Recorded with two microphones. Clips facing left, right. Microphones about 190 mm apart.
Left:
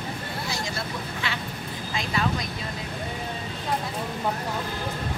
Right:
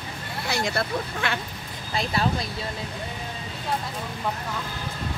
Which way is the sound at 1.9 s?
35° right (ahead or behind).